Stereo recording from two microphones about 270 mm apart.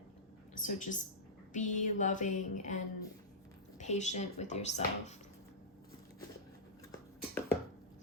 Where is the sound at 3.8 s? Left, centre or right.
Left.